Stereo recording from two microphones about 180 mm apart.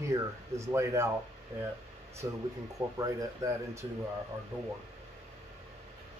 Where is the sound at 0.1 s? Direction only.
15° right (ahead or behind).